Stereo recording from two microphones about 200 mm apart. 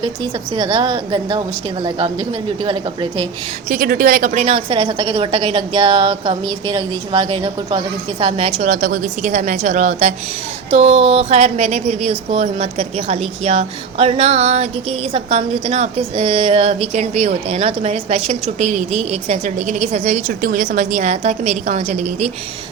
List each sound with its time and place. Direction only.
0.0 s a woman's voice: 20° right (ahead or behind)
3.7 s a woman's voice: 45° right (ahead or behind)